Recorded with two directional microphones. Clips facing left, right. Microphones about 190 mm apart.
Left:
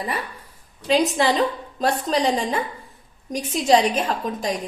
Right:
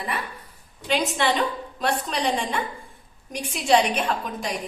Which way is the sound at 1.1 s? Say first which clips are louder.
Left 3 dB; 35° left (ahead or behind).